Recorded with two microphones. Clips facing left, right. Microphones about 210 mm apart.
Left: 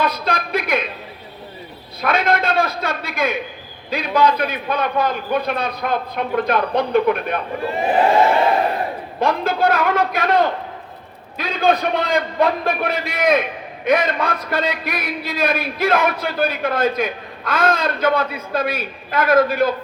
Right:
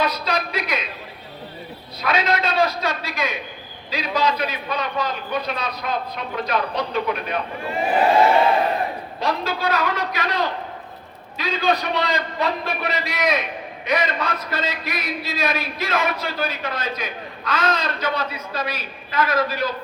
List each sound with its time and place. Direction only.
0.0 s a man's voice: 50° left (ahead or behind)
2.0 s a man's voice: 55° left (ahead or behind)
9.2 s a man's voice: 55° left (ahead or behind)